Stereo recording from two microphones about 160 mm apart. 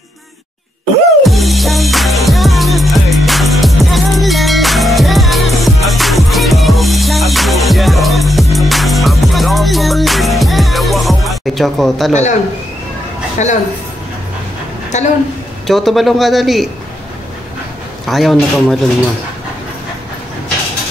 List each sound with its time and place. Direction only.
1.2 s music: centre (ahead or behind)
12.1 s a man's voice: 50° left (ahead or behind)
13.4 s a man's voice: 45° left (ahead or behind)
14.9 s a man's voice: 45° left (ahead or behind)
15.6 s a man's voice: centre (ahead or behind)
18.0 s a man's voice: centre (ahead or behind)